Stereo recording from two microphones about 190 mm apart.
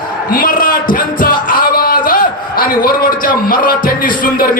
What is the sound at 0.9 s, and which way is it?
Music, 45° left (ahead or behind).